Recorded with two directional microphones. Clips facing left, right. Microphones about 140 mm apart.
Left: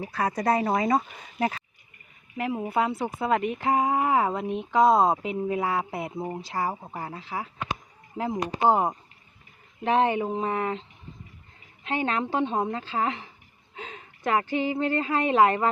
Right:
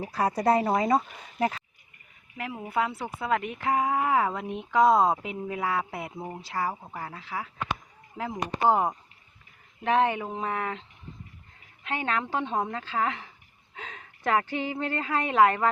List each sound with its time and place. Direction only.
0.1 s speech: 10° right (ahead or behind)
2.4 s speech: 25° left (ahead or behind)
5.9 s speech: 35° left (ahead or behind)
6.1 s speech: 15° left (ahead or behind)
8.7 s a woman's voice: 20° left (ahead or behind)